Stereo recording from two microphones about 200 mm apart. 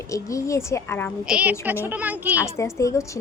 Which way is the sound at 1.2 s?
5° right (ahead or behind).